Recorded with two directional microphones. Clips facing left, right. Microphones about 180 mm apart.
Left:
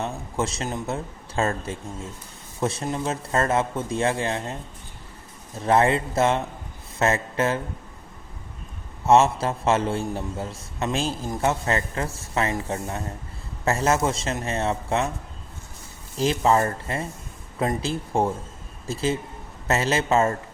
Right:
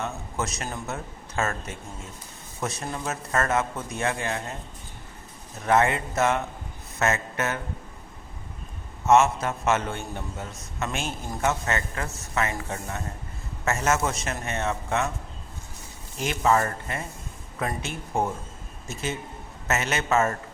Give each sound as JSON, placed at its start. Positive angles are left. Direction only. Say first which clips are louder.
{"t": 0.0, "sound": "speech", "louder": "left 3 dB", "side_deg": 30}
{"t": 5.5, "sound": "a man's voice", "louder": "left 2 dB", "side_deg": 30}
{"t": 9.0, "sound": "a man's voice", "louder": "left 2 dB", "side_deg": 30}
{"t": 16.1, "sound": "a man's voice", "louder": "left 3 dB", "side_deg": 30}